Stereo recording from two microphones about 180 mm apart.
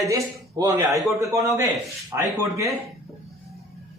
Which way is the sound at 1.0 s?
Centre (ahead or behind).